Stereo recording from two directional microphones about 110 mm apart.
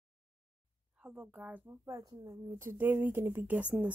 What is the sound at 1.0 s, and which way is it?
Speech, 15° right (ahead or behind).